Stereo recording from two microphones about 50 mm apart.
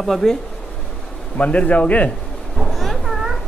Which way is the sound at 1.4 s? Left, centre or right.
Left.